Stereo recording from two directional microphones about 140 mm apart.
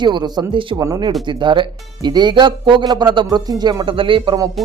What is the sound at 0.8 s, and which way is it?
Speech, 25° right (ahead or behind).